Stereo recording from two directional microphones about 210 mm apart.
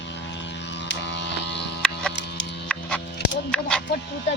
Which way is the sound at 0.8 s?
55° left (ahead or behind).